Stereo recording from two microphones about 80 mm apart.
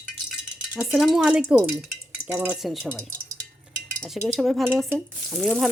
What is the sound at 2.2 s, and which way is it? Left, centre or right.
Speech, right.